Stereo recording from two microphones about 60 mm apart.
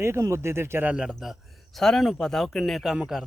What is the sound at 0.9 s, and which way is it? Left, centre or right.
Speech, centre.